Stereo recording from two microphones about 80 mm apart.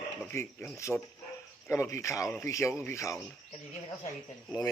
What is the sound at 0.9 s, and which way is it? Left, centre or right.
Speech, centre.